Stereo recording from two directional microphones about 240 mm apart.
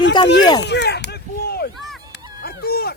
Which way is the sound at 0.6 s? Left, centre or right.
Left.